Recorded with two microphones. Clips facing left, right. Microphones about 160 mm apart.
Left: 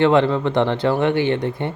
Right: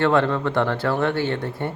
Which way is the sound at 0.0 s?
20° left (ahead or behind).